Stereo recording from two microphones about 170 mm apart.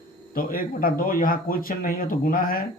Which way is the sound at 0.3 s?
55° left (ahead or behind).